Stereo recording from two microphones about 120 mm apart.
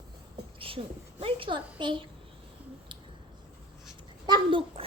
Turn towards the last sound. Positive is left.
turn(degrees=-45)  # may be behind; listen again after turning